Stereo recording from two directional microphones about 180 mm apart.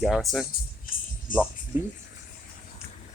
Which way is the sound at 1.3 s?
50° left (ahead or behind).